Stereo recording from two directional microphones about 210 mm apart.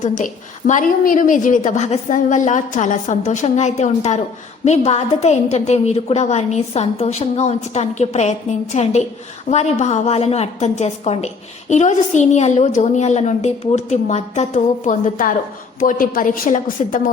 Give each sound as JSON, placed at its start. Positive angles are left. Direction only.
{"t": 0.0, "sound": "a woman's voice", "side_deg": 40}